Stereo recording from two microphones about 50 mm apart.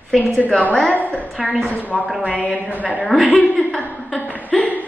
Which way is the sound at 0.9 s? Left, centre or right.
Left.